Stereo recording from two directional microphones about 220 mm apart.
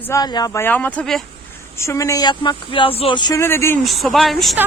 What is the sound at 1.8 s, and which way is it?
Speech, 15° left (ahead or behind).